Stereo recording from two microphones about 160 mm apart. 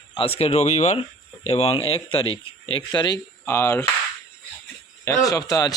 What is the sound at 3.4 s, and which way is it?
Speech, 15° left (ahead or behind).